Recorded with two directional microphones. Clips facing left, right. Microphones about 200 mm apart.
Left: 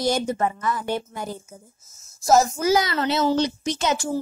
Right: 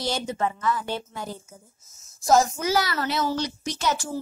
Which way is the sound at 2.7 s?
20° left (ahead or behind).